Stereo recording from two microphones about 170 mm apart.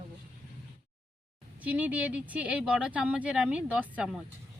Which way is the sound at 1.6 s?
10° right (ahead or behind).